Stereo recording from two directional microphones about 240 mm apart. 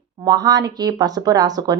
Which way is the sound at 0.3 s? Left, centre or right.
Centre.